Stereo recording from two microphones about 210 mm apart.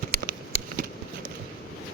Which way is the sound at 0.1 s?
45° right (ahead or behind).